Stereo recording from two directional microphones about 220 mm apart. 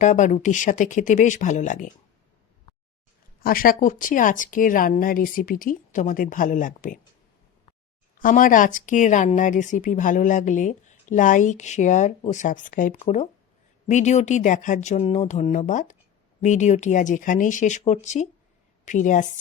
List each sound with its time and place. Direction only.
0.0 s speech: 35° left (ahead or behind)
3.4 s speech: 40° left (ahead or behind)
8.2 s speech: 35° left (ahead or behind)